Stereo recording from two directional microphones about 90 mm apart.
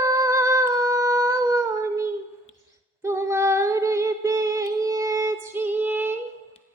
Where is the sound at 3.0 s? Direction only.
30° right (ahead or behind).